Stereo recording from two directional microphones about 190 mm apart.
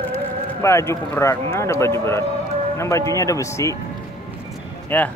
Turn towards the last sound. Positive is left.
turn(degrees=10)  # may be behind; listen again after turning